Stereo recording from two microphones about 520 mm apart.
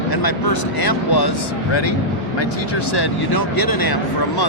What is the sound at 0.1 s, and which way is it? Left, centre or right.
Speech, left.